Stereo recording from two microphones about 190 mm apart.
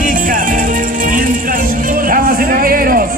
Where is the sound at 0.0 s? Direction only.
45° right (ahead or behind).